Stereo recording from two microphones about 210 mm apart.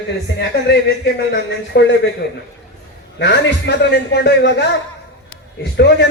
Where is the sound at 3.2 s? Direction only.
55° left (ahead or behind).